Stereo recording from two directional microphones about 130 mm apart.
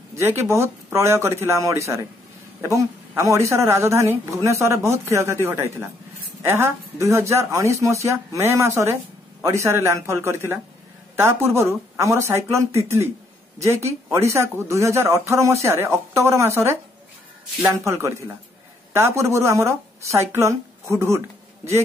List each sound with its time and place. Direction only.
0.1 s a woman's voice: 20° right (ahead or behind)